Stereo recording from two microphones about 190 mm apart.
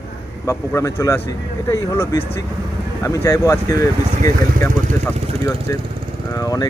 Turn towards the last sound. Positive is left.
turn(degrees=20)  # may be behind; listen again after turning